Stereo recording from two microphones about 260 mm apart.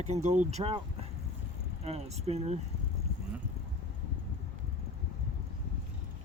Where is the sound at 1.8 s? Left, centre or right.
Right.